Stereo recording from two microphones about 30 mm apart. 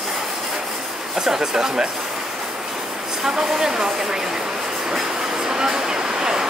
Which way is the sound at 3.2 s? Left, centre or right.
Centre.